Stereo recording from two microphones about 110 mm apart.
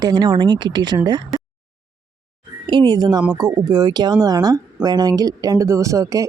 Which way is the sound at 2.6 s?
45° right (ahead or behind).